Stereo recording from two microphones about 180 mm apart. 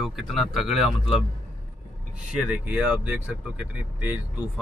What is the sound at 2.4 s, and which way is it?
Speech, 10° right (ahead or behind).